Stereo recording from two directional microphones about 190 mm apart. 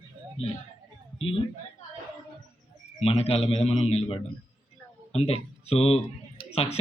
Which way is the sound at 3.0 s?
30° left (ahead or behind).